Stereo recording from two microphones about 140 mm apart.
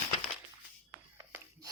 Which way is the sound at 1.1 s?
25° right (ahead or behind).